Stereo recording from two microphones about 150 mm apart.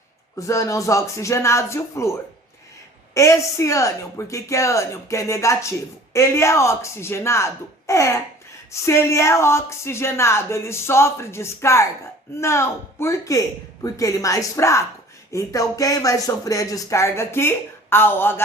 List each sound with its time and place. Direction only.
0.3 s speech: 20° left (ahead or behind)
3.2 s speech: 20° left (ahead or behind)